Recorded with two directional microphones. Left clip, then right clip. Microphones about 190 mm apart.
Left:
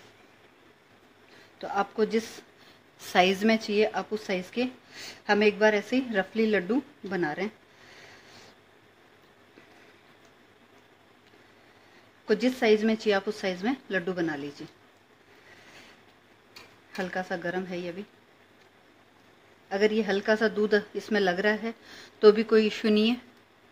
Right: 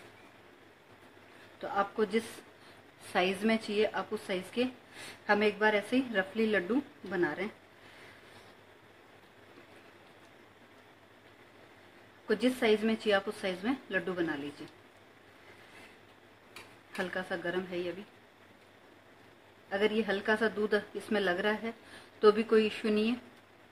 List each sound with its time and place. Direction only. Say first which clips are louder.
1.6 s a woman's voice: left 4 dB; 35° left (ahead or behind)
12.3 s a woman's voice: left 5 dB; 35° left (ahead or behind)
16.9 s a woman's voice: left 4 dB; 35° left (ahead or behind)
19.7 s a woman's voice: left 5 dB; 35° left (ahead or behind)